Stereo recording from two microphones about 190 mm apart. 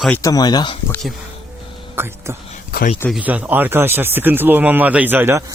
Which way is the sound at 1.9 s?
15° right (ahead or behind).